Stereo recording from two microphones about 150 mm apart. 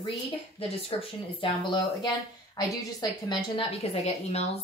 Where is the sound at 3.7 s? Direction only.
45° left (ahead or behind).